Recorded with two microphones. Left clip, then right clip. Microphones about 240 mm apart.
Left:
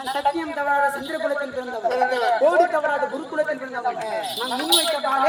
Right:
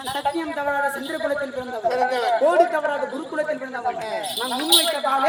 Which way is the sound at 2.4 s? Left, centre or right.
Centre.